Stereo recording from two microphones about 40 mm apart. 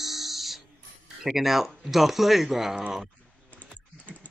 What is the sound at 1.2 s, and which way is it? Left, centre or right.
Speech, centre.